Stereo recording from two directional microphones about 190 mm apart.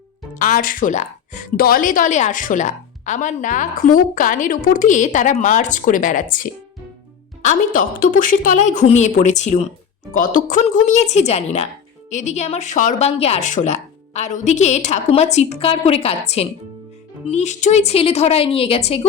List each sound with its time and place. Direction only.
0.3 s a woman's voice: 45° left (ahead or behind)